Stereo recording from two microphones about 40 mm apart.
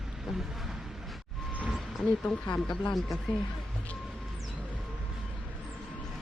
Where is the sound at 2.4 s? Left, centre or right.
Left.